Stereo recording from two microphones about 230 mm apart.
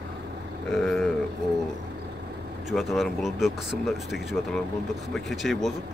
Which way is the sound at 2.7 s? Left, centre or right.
Centre.